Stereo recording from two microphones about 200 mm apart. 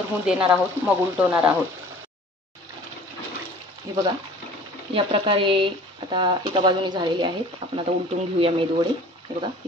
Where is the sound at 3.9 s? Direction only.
15° right (ahead or behind).